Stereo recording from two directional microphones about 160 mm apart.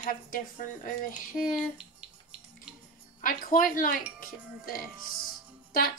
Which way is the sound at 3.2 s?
60° left (ahead or behind).